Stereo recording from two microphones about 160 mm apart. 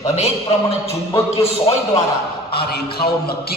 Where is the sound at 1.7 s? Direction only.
35° left (ahead or behind).